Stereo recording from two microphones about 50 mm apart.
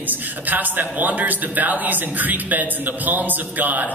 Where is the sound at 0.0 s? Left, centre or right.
Right.